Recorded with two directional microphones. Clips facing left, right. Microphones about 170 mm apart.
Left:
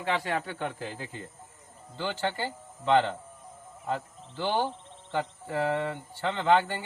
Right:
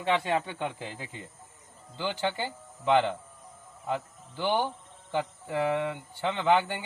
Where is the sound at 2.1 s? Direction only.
15° right (ahead or behind).